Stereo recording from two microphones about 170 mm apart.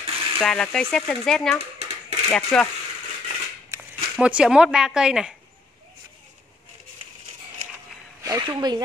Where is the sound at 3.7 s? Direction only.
20° right (ahead or behind).